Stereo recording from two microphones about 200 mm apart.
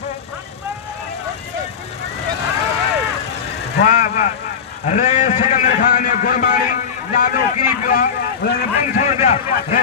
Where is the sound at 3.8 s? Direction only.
40° left (ahead or behind).